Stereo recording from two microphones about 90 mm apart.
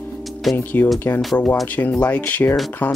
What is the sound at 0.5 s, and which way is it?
Speech, 20° left (ahead or behind).